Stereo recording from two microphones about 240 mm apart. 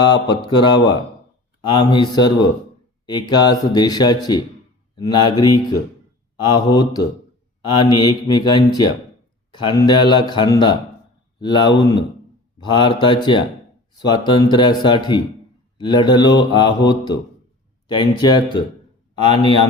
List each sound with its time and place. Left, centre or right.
0.0 s a man's voice: centre